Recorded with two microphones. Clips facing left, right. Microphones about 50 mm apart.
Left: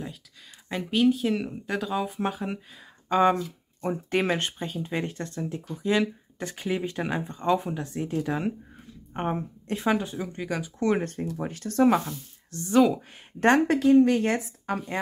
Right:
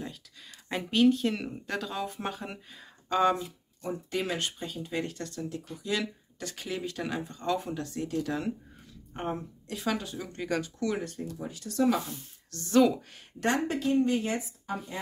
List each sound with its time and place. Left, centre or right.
0.7 s speech: centre
3.1 s speech: left
3.8 s speech: left; by 10.4 s centre
10.4 s speech: centre
10.8 s speech: left
12.1 s speech: left
13.7 s speech: left